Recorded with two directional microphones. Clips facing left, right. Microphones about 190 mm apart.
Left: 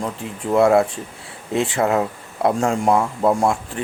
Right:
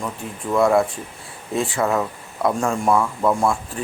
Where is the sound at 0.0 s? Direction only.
30° left (ahead or behind).